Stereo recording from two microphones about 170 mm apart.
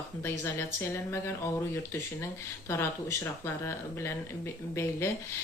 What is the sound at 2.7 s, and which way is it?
Speech, 15° left (ahead or behind).